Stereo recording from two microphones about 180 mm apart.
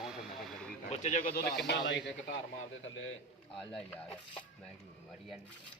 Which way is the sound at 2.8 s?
90° left.